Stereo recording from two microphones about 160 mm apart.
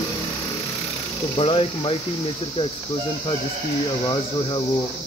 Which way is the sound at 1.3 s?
35° left (ahead or behind).